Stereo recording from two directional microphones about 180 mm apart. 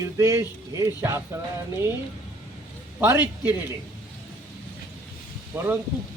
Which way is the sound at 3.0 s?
10° right (ahead or behind).